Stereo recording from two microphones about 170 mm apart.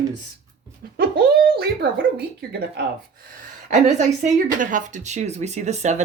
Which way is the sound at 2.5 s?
70° right (ahead or behind).